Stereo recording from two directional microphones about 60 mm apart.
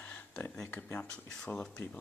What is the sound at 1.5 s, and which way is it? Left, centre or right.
Speech, left.